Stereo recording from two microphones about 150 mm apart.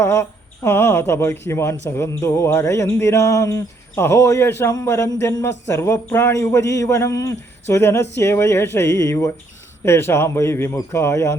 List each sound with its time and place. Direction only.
0.0 s speech: 15° left (ahead or behind)